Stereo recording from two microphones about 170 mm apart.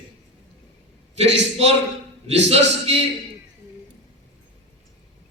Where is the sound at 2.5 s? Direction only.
40° right (ahead or behind).